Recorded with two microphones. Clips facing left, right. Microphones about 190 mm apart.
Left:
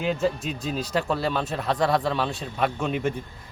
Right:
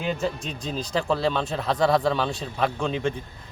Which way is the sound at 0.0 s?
Centre (ahead or behind).